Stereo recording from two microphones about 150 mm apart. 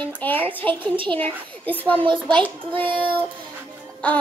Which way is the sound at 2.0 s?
35° right (ahead or behind).